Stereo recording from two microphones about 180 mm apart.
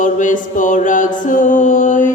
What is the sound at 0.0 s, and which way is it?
Mantra, 45° left (ahead or behind).